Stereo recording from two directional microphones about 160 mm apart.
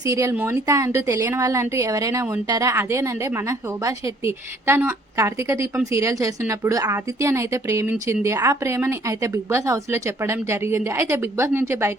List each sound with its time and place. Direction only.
0.0 s a woman's voice: 20° right (ahead or behind)